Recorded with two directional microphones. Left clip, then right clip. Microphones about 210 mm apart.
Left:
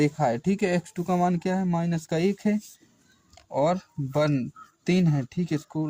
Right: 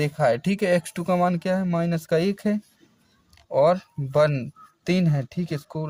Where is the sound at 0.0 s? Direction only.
40° right (ahead or behind).